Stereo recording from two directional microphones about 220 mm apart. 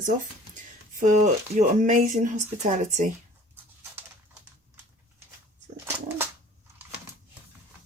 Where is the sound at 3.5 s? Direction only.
10° right (ahead or behind).